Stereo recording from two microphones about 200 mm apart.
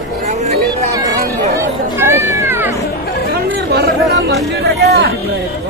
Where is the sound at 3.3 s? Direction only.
50° right (ahead or behind).